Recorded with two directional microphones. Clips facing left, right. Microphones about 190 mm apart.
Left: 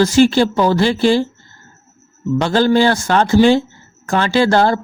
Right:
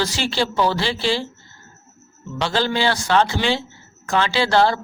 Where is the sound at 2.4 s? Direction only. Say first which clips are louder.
Left 7 dB; 45° left (ahead or behind).